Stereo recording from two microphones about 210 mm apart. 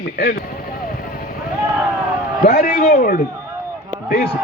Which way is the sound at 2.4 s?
45° left (ahead or behind).